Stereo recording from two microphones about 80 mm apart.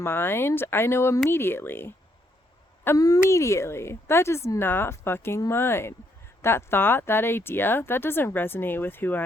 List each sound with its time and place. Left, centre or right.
0.0 s speech: left